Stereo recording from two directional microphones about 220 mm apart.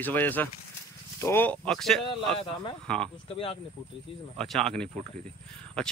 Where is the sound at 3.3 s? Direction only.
25° left (ahead or behind).